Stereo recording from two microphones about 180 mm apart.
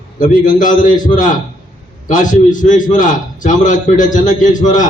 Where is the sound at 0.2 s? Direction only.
45° left (ahead or behind).